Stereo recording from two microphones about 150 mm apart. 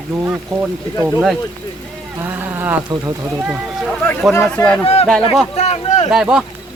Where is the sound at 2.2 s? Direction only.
15° right (ahead or behind).